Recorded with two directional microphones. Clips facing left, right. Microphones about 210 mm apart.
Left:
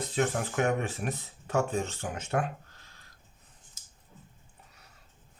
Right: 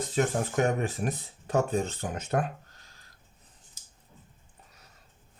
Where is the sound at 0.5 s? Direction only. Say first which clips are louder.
Right 2 dB; 35° right (ahead or behind).